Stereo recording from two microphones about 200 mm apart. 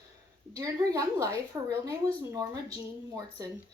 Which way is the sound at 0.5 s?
15° right (ahead or behind).